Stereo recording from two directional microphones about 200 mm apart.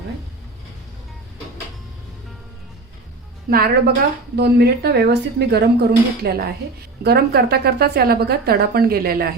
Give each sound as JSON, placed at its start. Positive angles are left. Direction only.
{"t": 3.5, "sound": "a woman's voice", "side_deg": -50}